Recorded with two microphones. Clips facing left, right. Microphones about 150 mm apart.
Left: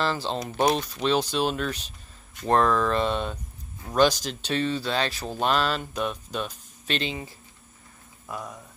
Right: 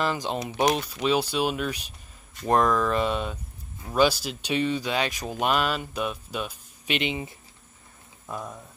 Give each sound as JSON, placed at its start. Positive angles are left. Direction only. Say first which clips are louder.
{"t": 0.0, "sound": "speech", "louder": "even", "side_deg": -10}